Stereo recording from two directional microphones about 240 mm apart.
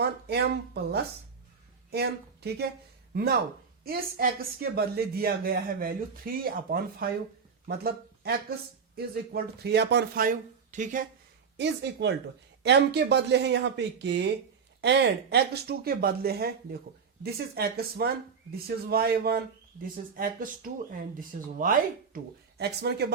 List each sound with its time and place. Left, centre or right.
0.0 s speech: right
3.8 s speech: right
11.5 s speech: right